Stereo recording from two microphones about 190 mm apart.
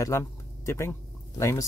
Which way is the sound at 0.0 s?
15° left (ahead or behind).